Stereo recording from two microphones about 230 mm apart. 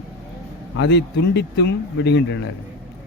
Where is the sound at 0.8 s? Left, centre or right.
Left.